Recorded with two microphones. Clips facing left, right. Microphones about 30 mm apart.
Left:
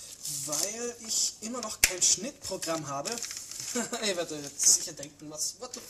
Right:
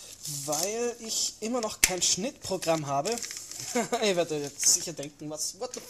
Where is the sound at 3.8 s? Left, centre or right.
Right.